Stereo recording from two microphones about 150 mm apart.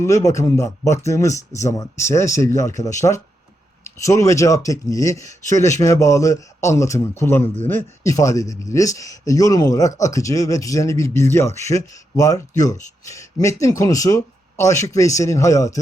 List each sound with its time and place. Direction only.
0.0 s speech: 20° left (ahead or behind)